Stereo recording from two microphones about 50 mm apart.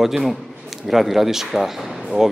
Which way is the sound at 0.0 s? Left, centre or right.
Centre.